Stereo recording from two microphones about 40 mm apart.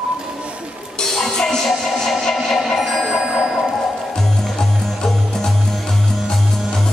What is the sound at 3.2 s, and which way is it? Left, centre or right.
Ding, right.